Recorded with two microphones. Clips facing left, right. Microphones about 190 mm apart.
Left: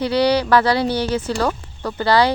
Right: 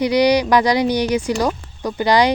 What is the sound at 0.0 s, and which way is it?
Speech, 15° right (ahead or behind).